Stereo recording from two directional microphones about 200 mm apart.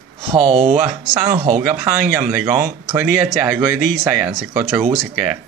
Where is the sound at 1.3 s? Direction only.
35° right (ahead or behind).